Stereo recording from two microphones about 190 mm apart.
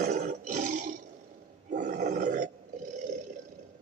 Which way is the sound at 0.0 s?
40° right (ahead or behind).